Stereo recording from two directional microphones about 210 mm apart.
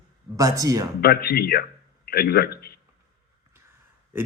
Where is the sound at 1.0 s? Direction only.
45° left (ahead or behind).